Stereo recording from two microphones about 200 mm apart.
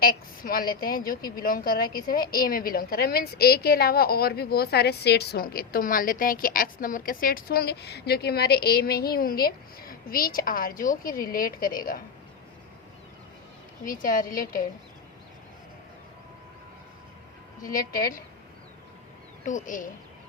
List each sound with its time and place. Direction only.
0.0 s a woman's voice: 45° left (ahead or behind)
13.8 s a woman's voice: 45° left (ahead or behind)
17.6 s a woman's voice: 15° left (ahead or behind)
19.5 s speech: 40° left (ahead or behind)